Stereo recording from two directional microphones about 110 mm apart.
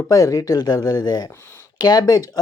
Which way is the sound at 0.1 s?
30° left (ahead or behind).